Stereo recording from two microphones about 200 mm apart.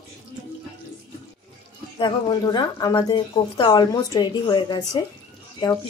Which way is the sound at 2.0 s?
20° left (ahead or behind).